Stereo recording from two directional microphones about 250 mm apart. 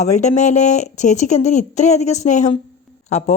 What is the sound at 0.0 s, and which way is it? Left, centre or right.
Speech, left.